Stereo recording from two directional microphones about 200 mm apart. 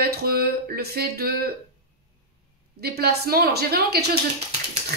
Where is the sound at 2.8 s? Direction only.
50° right (ahead or behind).